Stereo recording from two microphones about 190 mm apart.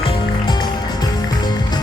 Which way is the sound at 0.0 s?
25° left (ahead or behind).